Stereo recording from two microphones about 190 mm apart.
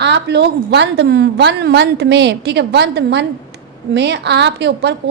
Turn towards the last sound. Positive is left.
turn(degrees=-60)  # may be behind; listen again after turning